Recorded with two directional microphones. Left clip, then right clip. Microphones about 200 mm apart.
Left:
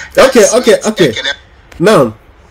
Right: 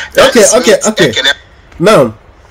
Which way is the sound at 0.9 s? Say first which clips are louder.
Right 3 dB; 40° right (ahead or behind).